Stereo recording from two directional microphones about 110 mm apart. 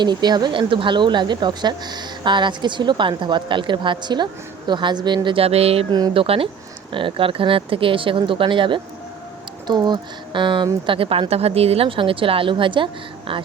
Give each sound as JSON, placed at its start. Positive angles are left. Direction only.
{"t": 0.0, "sound": "speech", "side_deg": -40}